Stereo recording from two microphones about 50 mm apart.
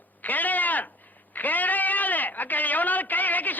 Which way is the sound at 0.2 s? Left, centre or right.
Left.